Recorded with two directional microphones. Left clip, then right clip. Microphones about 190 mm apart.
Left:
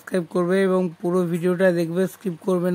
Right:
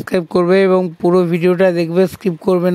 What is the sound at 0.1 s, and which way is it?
Speech, 30° right (ahead or behind).